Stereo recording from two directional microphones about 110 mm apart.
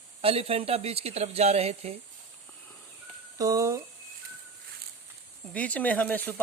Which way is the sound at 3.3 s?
30° right (ahead or behind).